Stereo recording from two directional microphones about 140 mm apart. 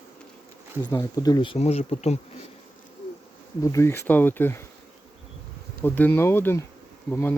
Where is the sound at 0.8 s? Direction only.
25° left (ahead or behind); by 2.1 s 50° left (ahead or behind).